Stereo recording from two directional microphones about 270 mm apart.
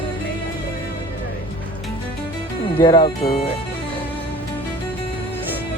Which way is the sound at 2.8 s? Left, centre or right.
Centre.